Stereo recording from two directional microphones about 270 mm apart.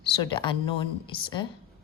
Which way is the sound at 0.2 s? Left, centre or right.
Centre.